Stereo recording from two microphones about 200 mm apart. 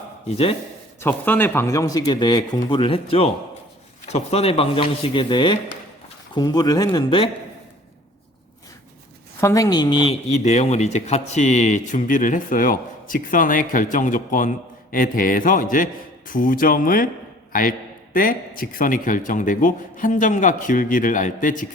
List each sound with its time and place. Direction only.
1.0 s speech: 10° left (ahead or behind); by 7.3 s 25° left (ahead or behind)
9.4 s a man's voice: 15° left (ahead or behind); by 21.7 s 40° left (ahead or behind)